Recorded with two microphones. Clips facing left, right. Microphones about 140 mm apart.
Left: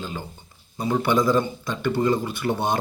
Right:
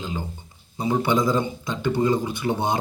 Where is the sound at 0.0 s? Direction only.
20° right (ahead or behind).